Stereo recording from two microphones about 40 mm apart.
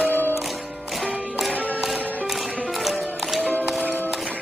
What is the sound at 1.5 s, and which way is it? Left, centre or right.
Music, left.